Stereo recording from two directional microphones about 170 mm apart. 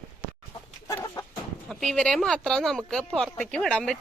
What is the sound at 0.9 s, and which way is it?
Chicken, 20° left (ahead or behind).